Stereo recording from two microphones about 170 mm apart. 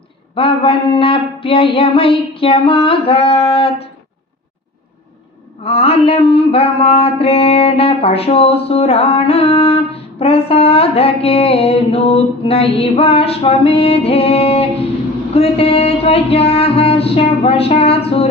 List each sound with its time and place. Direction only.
0.3 s mantra: 35° left (ahead or behind)
5.6 s mantra: 35° left (ahead or behind)